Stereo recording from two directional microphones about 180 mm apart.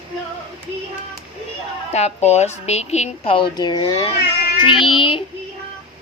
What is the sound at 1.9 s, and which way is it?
A child's voice, 35° left (ahead or behind).